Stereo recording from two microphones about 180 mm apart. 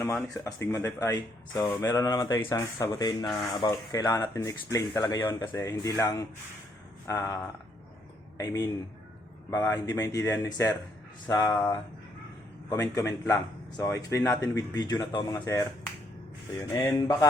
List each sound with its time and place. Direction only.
0.2 s speech: 15° left (ahead or behind)
8.4 s speech: 20° left (ahead or behind)
12.6 s speech: 20° left (ahead or behind)